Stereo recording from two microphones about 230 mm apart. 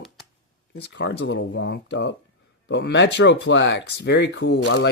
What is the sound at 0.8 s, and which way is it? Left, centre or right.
Speech, left.